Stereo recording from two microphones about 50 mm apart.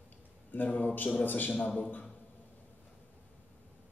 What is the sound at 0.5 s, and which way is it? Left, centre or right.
A man's voice, left.